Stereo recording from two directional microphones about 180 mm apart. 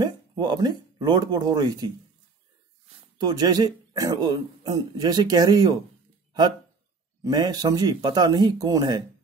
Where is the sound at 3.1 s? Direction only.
20° right (ahead or behind).